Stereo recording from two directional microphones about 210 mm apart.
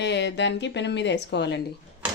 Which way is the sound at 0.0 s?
55° left (ahead or behind).